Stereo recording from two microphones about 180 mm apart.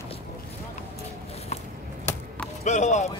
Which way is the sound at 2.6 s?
40° left (ahead or behind).